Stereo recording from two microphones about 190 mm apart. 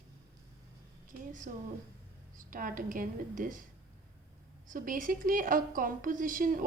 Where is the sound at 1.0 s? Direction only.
40° right (ahead or behind).